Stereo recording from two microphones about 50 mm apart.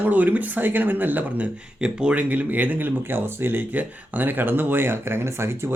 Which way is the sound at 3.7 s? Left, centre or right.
Right.